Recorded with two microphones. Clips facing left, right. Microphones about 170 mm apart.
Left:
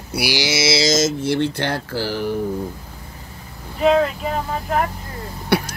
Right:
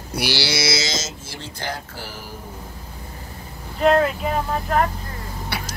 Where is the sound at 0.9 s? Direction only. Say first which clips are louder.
Left 13 dB; 50° left (ahead or behind); by 2.3 s 75° left (ahead or behind).